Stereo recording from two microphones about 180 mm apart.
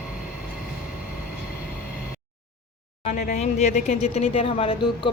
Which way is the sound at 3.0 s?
40° left (ahead or behind).